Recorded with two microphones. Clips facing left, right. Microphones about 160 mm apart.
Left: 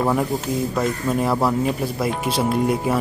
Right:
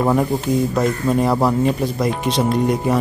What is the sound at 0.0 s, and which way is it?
Speech, centre (ahead or behind).